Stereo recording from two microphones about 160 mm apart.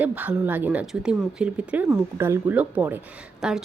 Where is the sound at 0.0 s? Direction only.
10° right (ahead or behind).